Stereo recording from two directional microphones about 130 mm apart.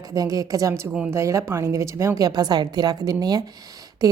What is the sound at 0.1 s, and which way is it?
A woman's voice, 30° right (ahead or behind).